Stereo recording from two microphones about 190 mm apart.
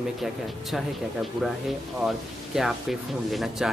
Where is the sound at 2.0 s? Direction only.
Centre (ahead or behind).